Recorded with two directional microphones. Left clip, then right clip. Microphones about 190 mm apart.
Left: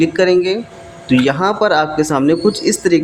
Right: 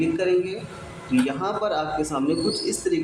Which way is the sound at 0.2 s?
50° left (ahead or behind).